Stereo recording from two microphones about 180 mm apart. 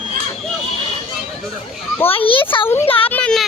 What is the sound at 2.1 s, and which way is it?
Children playing, 30° left (ahead or behind).